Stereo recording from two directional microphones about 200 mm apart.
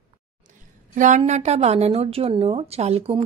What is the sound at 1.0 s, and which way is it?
A woman's voice, 35° right (ahead or behind).